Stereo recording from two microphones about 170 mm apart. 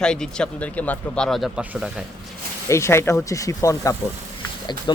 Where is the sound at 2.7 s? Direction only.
15° left (ahead or behind).